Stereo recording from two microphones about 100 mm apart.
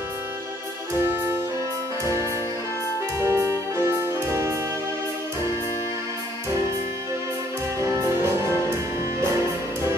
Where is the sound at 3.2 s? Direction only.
25° right (ahead or behind).